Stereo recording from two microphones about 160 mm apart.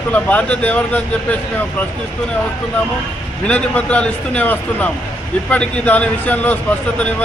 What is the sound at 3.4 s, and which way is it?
Speech, 5° left (ahead or behind).